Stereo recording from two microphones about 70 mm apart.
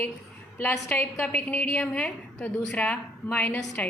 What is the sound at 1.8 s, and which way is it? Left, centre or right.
A woman's voice, centre.